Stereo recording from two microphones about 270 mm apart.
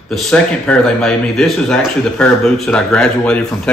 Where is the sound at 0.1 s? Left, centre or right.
Centre.